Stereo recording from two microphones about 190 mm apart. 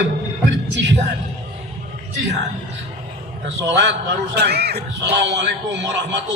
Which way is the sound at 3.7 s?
70° right (ahead or behind).